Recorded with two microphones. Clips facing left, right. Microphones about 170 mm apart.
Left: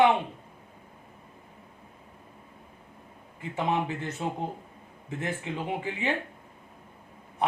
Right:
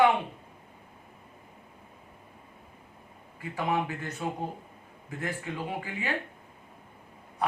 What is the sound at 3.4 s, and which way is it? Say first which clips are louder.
A man's voice: left 1 dB; 25° left (ahead or behind).